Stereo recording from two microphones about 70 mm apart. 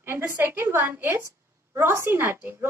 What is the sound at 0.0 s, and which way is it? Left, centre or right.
A woman's voice, right.